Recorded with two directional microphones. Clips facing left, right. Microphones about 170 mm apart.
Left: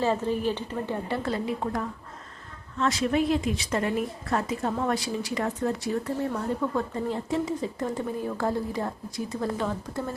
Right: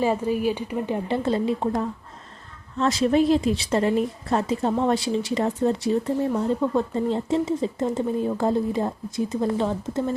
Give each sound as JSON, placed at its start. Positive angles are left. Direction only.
{"t": 0.0, "sound": "a woman's voice", "side_deg": -10}